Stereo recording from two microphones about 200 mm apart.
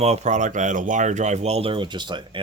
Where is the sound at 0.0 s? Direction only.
35° right (ahead or behind).